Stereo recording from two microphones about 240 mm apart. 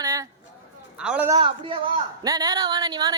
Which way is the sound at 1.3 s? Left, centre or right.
Right.